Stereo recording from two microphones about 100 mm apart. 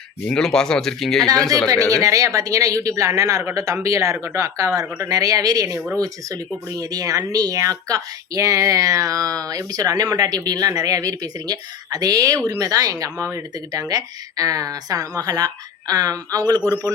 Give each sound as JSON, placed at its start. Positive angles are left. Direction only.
{"t": 0.3, "sound": "speech", "side_deg": 5}
{"t": 1.6, "sound": "speech", "side_deg": -35}